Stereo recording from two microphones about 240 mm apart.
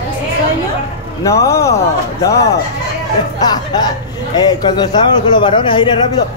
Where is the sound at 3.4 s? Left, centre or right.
Centre.